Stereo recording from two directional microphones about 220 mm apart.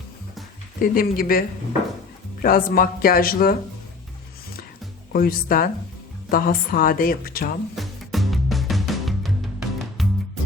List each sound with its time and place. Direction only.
0.8 s speech: 40° left (ahead or behind)
5.1 s speech: 40° left (ahead or behind)
7.8 s music: centre (ahead or behind)